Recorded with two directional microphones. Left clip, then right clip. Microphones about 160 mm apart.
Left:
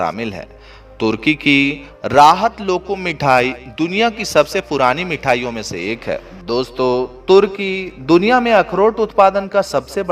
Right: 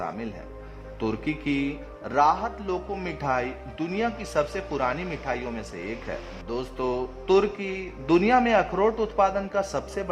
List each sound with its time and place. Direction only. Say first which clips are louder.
0.0 s a man's voice: left 13 dB; 45° left (ahead or behind)